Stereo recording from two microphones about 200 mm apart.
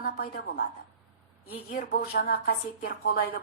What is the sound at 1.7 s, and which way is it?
A woman's voice, 45° left (ahead or behind).